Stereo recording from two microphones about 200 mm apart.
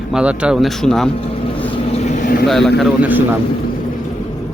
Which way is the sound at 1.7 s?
30° left (ahead or behind).